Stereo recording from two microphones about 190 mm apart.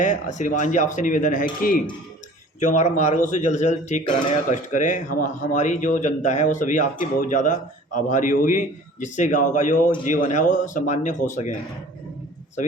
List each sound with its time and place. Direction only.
0.0 s a man's voice: 40° left (ahead or behind)
2.6 s a man's voice: 40° left (ahead or behind)
12.6 s speech: 40° left (ahead or behind)